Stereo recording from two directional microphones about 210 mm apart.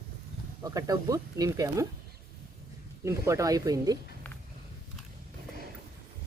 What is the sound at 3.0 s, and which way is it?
Speech, 15° right (ahead or behind).